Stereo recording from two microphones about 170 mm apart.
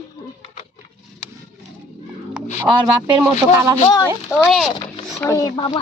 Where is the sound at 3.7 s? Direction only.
30° left (ahead or behind).